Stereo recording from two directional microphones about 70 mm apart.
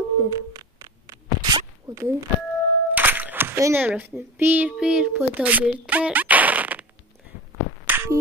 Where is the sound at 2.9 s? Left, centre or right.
Right.